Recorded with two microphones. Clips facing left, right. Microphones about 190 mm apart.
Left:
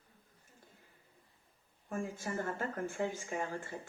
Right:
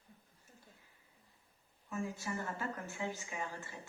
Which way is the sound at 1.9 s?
50° left (ahead or behind).